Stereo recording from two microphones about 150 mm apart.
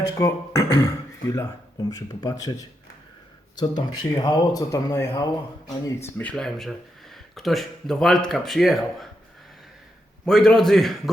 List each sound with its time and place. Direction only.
0.2 s speech: 20° left (ahead or behind)
1.9 s speech: 25° left (ahead or behind)
3.5 s speech: 30° left (ahead or behind)
6.1 s speech: 5° left (ahead or behind)
10.2 s speech: 5° left (ahead or behind)